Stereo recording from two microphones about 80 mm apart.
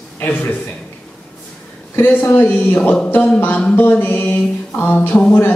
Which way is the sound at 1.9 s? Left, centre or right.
Left.